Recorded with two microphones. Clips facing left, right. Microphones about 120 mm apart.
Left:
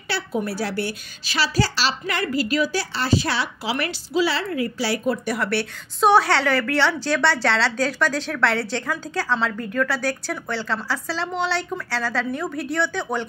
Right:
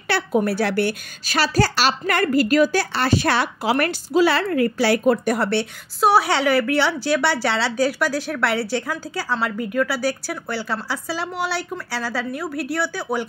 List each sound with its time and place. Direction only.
0.1 s a woman's voice: 60° right (ahead or behind)
5.4 s a woman's voice: 25° right (ahead or behind)
5.9 s a woman's voice: 10° right (ahead or behind)